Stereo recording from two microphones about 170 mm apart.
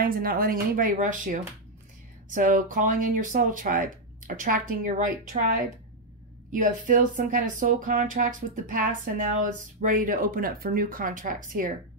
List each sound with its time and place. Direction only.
0.0 s speech: 60° right (ahead or behind)